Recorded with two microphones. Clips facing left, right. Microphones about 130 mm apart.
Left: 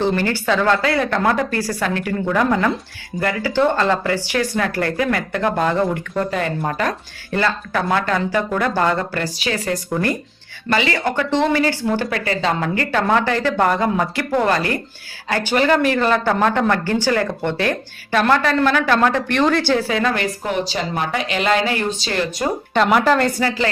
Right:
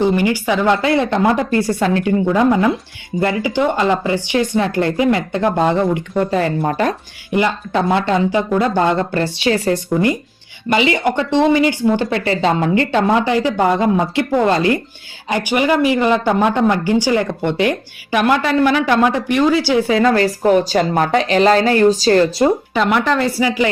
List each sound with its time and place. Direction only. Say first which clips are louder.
0.0 s speech: right 4 dB; 15° right (ahead or behind)
6.3 s a woman's voice: right 5 dB; 35° right (ahead or behind)
7.3 s speech: right 3 dB; 15° right (ahead or behind)
10.7 s speech: right 4 dB; 20° right (ahead or behind)
19.9 s a woman's voice: right 6 dB; 30° right (ahead or behind)
22.7 s speech: left 1 dB; centre (ahead or behind)
23.4 s speech: right 4 dB; 15° right (ahead or behind)